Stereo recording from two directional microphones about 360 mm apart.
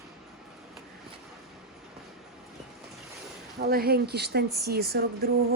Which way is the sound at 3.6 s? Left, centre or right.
Right.